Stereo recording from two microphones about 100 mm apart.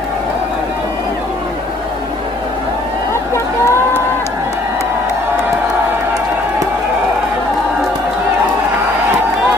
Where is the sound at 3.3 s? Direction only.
30° left (ahead or behind).